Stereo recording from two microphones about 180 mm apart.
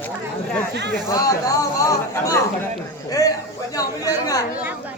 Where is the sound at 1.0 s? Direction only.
20° left (ahead or behind).